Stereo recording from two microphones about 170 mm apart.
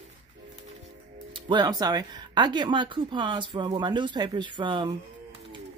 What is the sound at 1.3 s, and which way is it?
Speech, 25° right (ahead or behind).